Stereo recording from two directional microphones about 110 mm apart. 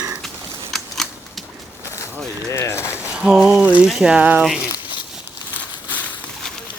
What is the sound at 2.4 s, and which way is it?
Mechanisms, 25° left (ahead or behind).